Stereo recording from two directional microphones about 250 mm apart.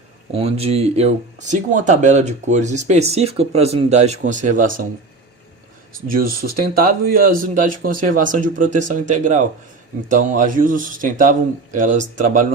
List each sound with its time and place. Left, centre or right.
0.3 s speech: right
5.9 s speech: right